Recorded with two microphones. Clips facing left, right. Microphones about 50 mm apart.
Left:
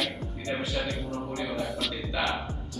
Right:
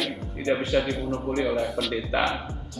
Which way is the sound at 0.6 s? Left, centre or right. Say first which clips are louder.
Right 6 dB; right.